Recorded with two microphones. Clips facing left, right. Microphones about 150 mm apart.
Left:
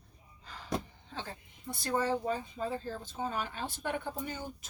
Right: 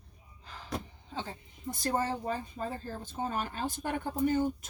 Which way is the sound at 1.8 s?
50° right (ahead or behind).